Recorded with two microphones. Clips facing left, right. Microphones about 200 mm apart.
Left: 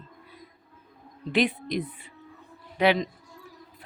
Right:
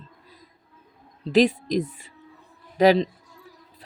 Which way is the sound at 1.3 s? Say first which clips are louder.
Right 6 dB; 40° right (ahead or behind).